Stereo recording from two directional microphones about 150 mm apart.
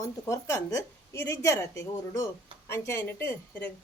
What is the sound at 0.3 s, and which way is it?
A woman's voice, 20° left (ahead or behind).